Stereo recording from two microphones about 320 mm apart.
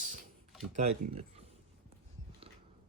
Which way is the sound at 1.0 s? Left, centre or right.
Centre.